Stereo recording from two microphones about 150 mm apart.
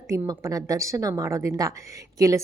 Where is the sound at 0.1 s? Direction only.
20° right (ahead or behind).